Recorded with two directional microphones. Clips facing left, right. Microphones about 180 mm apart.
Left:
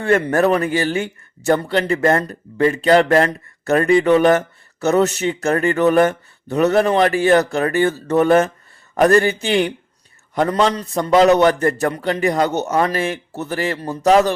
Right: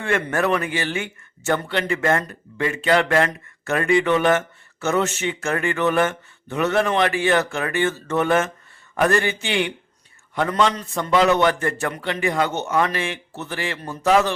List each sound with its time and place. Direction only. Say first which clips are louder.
0.0 s speech: left 6 dB; 35° left (ahead or behind)